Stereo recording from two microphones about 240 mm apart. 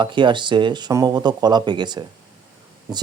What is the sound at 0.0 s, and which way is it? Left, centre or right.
Speech, centre.